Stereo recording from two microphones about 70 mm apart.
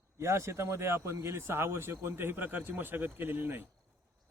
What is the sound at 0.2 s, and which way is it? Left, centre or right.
Speech, right.